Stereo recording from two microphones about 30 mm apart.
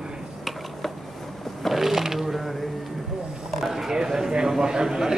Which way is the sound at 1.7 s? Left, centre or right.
Centre.